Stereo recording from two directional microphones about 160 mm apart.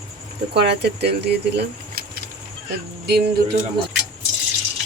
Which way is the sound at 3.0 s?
90° right.